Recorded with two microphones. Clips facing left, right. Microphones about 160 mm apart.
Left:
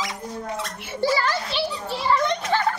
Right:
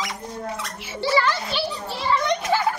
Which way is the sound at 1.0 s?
45° left (ahead or behind).